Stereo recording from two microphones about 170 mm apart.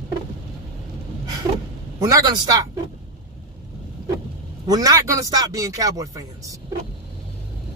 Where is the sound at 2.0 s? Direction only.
20° right (ahead or behind).